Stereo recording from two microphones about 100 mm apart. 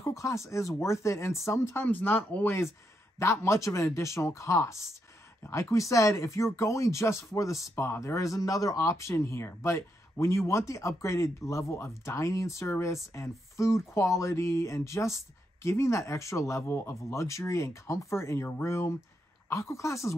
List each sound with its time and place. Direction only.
0.0 s speech: 30° left (ahead or behind)